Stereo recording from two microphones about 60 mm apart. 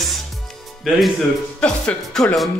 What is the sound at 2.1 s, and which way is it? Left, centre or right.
Speech, centre.